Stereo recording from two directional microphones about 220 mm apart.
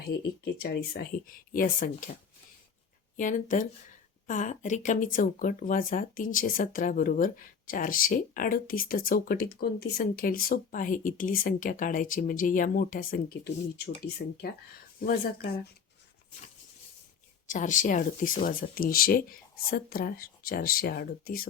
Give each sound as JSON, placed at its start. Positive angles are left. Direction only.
{"t": 0.0, "sound": "speech", "side_deg": 45}
{"t": 3.2, "sound": "speech", "side_deg": 35}
{"t": 15.0, "sound": "speech", "side_deg": 45}
{"t": 17.5, "sound": "speech", "side_deg": 35}